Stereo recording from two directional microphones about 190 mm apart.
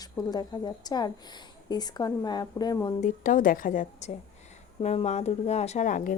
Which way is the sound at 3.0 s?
45° left (ahead or behind).